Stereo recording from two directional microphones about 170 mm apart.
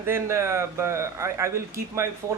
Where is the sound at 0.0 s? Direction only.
15° right (ahead or behind).